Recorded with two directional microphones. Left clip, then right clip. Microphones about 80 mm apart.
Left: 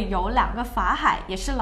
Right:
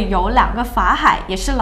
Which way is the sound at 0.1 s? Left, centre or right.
Right.